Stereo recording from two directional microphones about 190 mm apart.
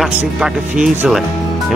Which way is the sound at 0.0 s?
5° right (ahead or behind).